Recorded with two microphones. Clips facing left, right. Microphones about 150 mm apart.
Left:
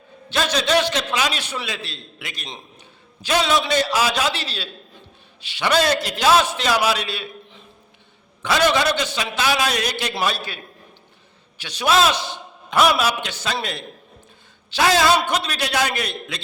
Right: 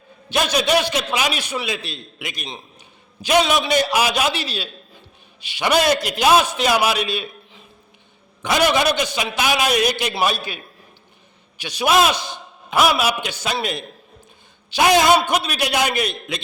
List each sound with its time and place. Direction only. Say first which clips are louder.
0.3 s a man's voice: right 2 dB; 10° right (ahead or behind)
8.4 s a man's voice: right 1 dB; 15° right (ahead or behind)